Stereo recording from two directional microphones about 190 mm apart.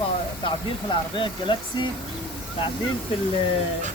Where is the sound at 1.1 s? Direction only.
25° left (ahead or behind).